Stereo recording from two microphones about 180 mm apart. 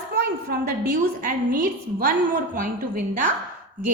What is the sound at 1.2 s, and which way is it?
A woman's voice, 50° right (ahead or behind).